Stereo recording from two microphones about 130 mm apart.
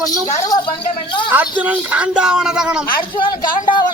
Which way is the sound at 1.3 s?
10° right (ahead or behind).